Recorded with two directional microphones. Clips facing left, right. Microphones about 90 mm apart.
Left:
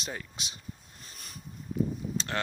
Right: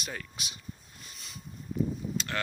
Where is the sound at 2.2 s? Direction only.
30° left (ahead or behind).